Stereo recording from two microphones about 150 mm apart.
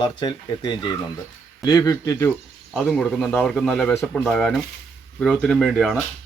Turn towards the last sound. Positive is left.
turn(degrees=0)  # may be behind; listen again after turning